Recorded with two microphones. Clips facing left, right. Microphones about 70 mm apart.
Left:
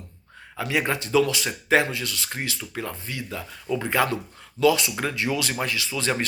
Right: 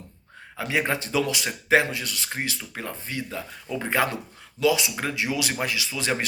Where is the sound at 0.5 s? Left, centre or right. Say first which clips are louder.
Even; centre.